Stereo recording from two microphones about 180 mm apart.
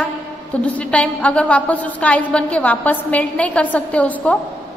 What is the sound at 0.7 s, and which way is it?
A woman's voice, 5° left (ahead or behind).